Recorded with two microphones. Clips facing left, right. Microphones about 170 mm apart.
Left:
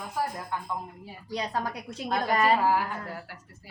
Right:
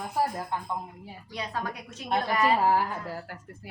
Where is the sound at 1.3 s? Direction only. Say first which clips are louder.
Left 4 dB; 40° left (ahead or behind).